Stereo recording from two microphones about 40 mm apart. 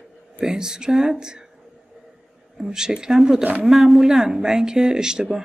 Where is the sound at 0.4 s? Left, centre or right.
Centre.